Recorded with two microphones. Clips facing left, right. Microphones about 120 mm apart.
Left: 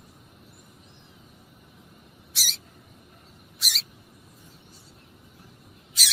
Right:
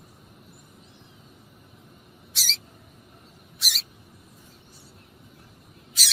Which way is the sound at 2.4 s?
10° left (ahead or behind).